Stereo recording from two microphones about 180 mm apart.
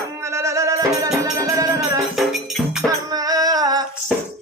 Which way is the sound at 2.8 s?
20° right (ahead or behind).